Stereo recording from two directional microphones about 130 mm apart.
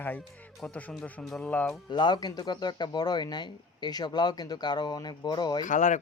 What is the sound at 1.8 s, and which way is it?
Speech, 35° left (ahead or behind).